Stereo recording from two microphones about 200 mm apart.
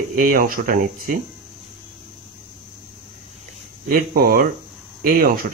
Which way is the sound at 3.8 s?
45° right (ahead or behind).